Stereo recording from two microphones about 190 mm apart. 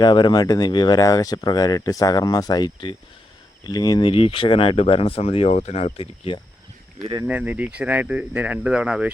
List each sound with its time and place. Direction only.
0.0 s speech: 20° left (ahead or behind)
7.3 s speech: 10° right (ahead or behind)